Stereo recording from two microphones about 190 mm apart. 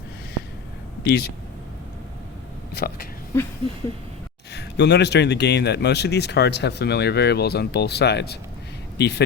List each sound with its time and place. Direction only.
1.0 s a man's voice: 60° left (ahead or behind)
2.7 s speech: 55° left (ahead or behind)
4.5 s a man's voice: 65° left (ahead or behind)